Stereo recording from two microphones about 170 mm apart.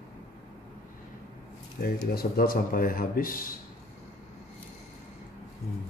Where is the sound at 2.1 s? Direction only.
60° left (ahead or behind).